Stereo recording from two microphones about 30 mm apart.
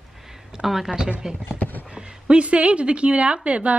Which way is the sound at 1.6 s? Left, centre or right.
Left.